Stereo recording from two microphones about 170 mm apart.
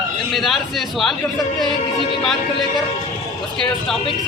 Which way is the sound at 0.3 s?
Centre (ahead or behind).